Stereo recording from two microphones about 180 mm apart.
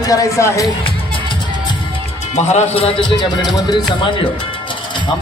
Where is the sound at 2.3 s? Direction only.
40° left (ahead or behind).